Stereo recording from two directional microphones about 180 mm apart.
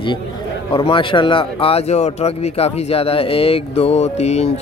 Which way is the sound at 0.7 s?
30° left (ahead or behind).